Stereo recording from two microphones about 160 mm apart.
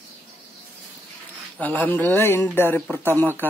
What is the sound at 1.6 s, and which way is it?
Speech, 10° left (ahead or behind).